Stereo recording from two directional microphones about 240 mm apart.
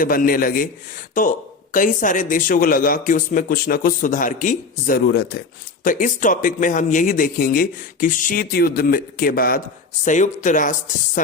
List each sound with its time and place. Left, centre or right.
0.0 s speech: left